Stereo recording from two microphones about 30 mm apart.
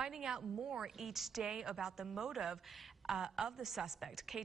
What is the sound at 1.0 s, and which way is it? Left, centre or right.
Speech, centre.